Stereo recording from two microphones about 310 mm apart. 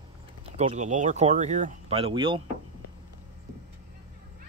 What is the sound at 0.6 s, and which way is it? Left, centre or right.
Speech, right.